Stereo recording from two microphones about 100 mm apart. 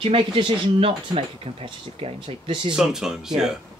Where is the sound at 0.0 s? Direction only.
65° right (ahead or behind).